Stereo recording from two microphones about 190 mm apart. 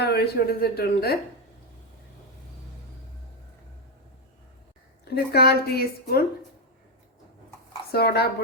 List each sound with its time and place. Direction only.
0.0 s speech: 55° left (ahead or behind)
5.0 s speech: 55° left (ahead or behind)
7.9 s speech: 55° left (ahead or behind)